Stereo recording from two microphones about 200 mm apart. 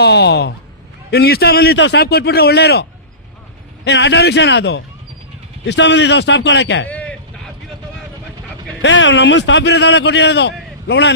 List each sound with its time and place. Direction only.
0.0 s a man's voice: 55° left (ahead or behind)
3.8 s a man's voice: 60° left (ahead or behind)
6.8 s vehicle: 5° left (ahead or behind)
8.8 s a man's voice: 65° left (ahead or behind)